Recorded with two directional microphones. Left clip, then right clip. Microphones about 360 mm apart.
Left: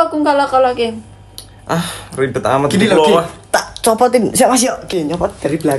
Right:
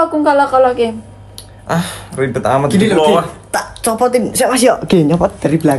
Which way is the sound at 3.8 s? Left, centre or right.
Left.